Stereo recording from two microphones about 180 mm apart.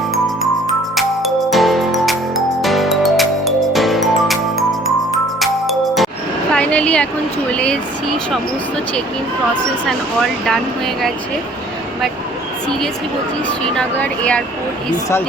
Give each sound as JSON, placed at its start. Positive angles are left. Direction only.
{"t": 0.9, "sound": "music", "side_deg": 0}
{"t": 6.5, "sound": "a sound", "side_deg": 5}
{"t": 7.5, "sound": "speech", "side_deg": 5}
{"t": 9.8, "sound": "speech", "side_deg": 5}
{"t": 13.7, "sound": "speech", "side_deg": 5}